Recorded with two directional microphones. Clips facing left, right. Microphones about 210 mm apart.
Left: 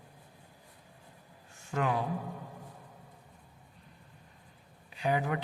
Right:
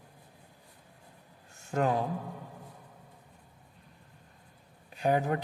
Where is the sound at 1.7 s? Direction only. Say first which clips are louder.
Right 3 dB; 40° right (ahead or behind).